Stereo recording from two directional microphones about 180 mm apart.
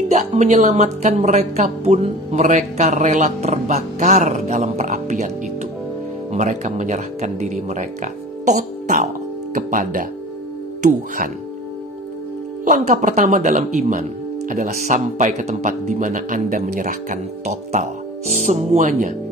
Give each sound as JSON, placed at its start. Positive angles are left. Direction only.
{"t": 0.1, "sound": "speech", "side_deg": -40}
{"t": 12.6, "sound": "speech", "side_deg": -45}